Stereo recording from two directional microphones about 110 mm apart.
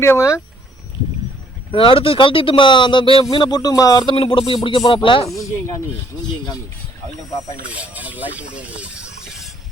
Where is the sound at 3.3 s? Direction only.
40° left (ahead or behind).